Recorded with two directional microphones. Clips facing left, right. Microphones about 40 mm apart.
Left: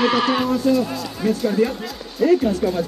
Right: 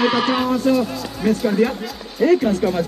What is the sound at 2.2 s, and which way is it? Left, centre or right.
Speech, right.